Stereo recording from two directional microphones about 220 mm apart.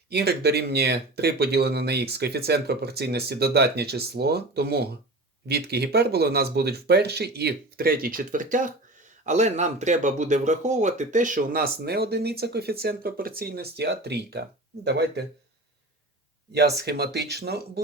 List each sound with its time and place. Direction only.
0.1 s speech: 50° right (ahead or behind)
16.6 s speech: 50° right (ahead or behind)